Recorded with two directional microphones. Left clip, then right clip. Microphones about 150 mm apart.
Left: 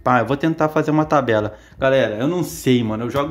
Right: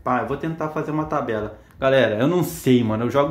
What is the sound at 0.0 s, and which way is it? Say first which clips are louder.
Speech: left 6 dB; 65° left (ahead or behind).